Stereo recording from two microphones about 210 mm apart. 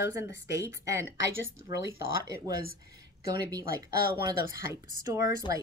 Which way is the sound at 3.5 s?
15° right (ahead or behind).